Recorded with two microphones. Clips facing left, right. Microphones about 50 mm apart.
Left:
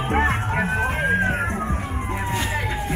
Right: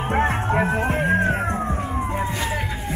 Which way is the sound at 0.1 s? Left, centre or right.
Left.